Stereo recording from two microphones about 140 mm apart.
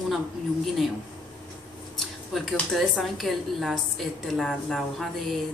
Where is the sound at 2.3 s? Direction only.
Centre (ahead or behind).